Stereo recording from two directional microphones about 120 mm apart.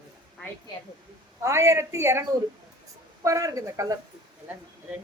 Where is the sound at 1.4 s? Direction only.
25° right (ahead or behind).